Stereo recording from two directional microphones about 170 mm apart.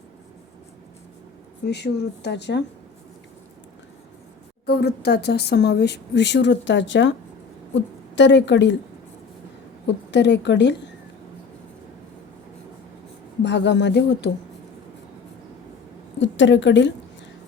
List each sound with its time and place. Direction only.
1.6 s speech: 80° left
4.6 s speech: 70° left (ahead or behind); by 8.7 s 90° left
9.8 s a woman's voice: 90° left
13.4 s speech: 90° left
16.2 s speech: 90° left